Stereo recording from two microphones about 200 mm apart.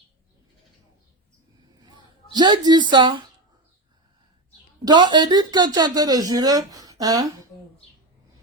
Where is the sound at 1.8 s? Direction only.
20° right (ahead or behind).